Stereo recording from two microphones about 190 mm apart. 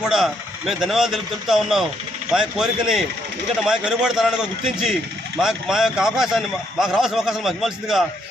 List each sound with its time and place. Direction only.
0.1 s a man's voice: centre (ahead or behind)